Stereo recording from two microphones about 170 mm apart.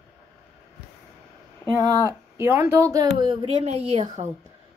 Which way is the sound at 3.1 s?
30° right (ahead or behind).